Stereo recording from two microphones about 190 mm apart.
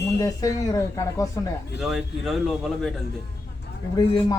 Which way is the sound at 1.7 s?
Centre (ahead or behind).